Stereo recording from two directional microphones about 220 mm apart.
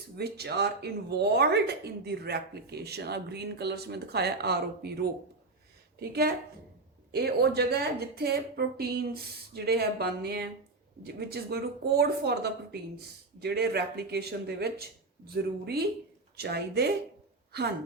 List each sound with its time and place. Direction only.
0.2 s speech: 45° right (ahead or behind)
6.0 s speech: 45° right (ahead or behind)